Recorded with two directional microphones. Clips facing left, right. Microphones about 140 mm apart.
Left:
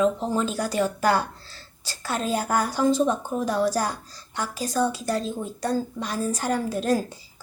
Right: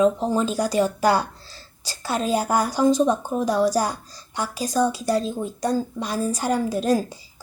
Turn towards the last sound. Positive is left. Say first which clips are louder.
# right 3 dB
turn(degrees=-15)  # may be behind; listen again after turning